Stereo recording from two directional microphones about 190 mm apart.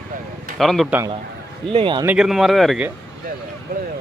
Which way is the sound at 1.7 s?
25° right (ahead or behind).